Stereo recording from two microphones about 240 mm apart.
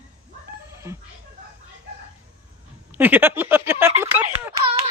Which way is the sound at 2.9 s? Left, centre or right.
Centre.